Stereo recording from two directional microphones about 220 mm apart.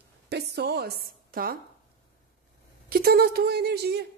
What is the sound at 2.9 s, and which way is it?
A woman's voice, 45° right (ahead or behind).